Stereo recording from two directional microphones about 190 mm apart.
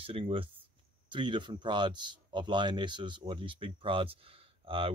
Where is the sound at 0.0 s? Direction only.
30° right (ahead or behind).